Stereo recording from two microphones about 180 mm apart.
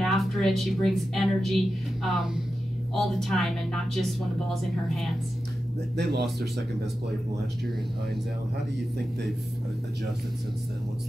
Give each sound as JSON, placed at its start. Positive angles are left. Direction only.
{"t": 0.0, "sound": "a woman's voice", "side_deg": 0}
{"t": 5.9, "sound": "speech", "side_deg": -65}